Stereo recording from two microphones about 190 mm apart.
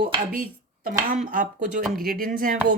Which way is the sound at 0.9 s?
45° right (ahead or behind).